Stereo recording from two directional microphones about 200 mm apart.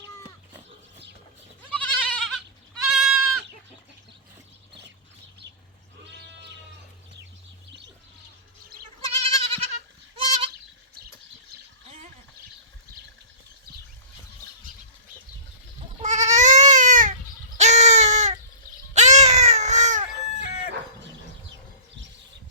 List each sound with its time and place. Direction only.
1.7 s goat: 5° left (ahead or behind)
9.0 s goat: 30° right (ahead or behind)
16.0 s goat: 35° right (ahead or behind)
17.6 s a sound: 35° right (ahead or behind)